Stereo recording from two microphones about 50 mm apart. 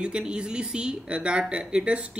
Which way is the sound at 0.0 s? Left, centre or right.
Centre.